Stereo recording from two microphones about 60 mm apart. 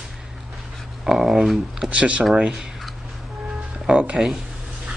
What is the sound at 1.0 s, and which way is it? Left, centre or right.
Speech, centre.